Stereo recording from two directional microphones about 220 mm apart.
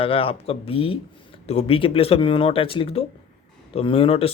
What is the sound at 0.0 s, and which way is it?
Speech, 25° left (ahead or behind).